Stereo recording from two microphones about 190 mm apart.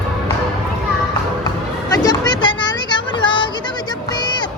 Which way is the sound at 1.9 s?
20° left (ahead or behind).